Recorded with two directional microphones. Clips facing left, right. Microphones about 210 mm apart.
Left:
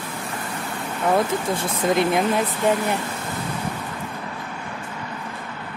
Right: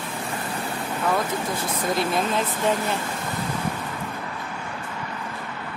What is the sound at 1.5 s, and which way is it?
Speech, 25° left (ahead or behind).